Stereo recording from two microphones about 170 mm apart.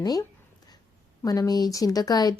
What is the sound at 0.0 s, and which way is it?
A woman's voice, 20° left (ahead or behind).